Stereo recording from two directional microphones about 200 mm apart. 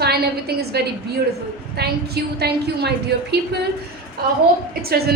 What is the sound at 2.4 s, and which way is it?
Speech, 55° right (ahead or behind).